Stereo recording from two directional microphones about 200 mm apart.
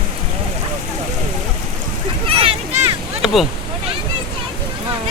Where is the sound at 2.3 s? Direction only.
25° right (ahead or behind).